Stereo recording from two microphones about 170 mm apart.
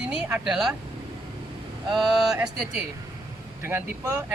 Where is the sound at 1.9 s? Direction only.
5° right (ahead or behind).